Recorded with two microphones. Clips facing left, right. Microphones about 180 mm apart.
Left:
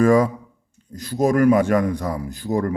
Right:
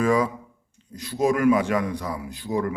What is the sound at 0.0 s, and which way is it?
Speech, 45° left (ahead or behind).